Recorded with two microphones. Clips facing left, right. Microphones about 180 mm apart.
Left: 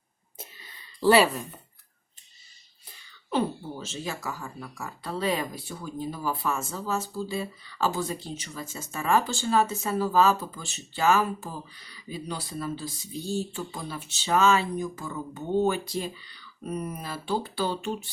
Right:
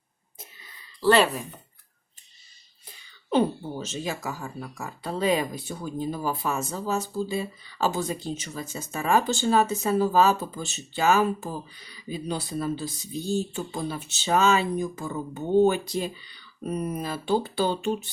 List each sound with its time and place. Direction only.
1.0 s speech: 5° left (ahead or behind)
3.2 s speech: 20° right (ahead or behind)